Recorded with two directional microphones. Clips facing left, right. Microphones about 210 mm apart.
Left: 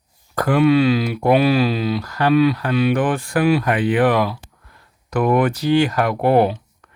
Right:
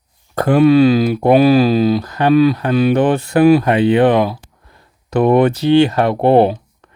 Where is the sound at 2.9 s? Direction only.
25° right (ahead or behind).